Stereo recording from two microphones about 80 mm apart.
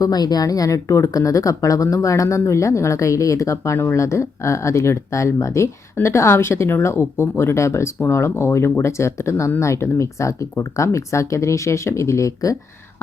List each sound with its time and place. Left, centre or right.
0.0 s speech: left